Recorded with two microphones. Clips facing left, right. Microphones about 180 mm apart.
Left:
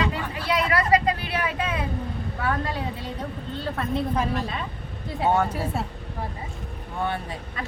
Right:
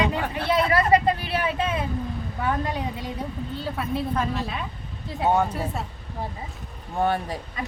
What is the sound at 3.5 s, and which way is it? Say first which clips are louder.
Speech: left 1 dB; 10° right (ahead or behind).